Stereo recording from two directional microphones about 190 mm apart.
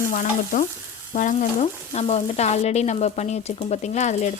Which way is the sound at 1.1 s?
40° left (ahead or behind).